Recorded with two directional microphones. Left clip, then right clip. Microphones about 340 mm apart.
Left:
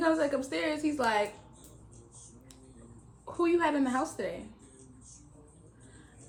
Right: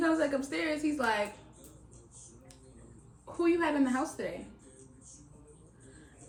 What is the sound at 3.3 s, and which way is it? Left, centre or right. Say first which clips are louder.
Speech: left 1 dB; centre.